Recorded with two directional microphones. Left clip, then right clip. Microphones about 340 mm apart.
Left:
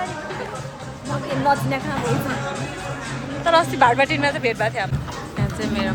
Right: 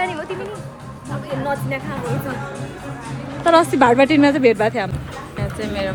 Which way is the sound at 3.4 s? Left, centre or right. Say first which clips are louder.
Right 3 dB; centre.